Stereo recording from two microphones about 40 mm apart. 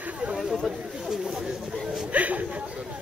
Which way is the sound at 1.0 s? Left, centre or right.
Centre.